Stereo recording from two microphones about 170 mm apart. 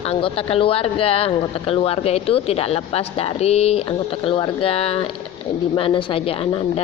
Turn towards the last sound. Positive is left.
turn(degrees=35)  # may be behind; listen again after turning